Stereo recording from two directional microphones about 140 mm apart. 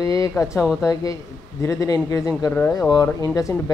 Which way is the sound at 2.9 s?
25° left (ahead or behind).